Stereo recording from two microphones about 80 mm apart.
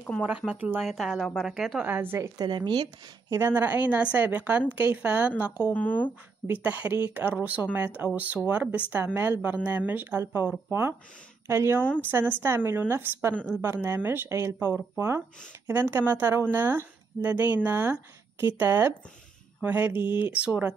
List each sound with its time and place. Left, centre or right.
0.5 s a woman's voice: centre
0.8 s a woman's voice: centre
1.9 s speech: right
2.3 s speech: right
3.3 s speech: right
5.7 s speech: left
6.4 s speech: right